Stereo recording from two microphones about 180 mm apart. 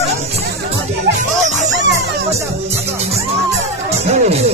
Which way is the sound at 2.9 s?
35° right (ahead or behind).